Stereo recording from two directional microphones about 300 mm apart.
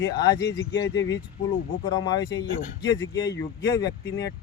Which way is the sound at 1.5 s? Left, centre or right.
Centre.